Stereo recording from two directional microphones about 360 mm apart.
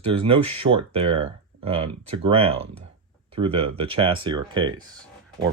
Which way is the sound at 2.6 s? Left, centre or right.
Right.